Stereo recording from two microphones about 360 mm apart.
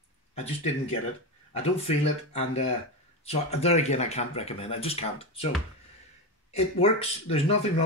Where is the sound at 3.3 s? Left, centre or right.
Centre.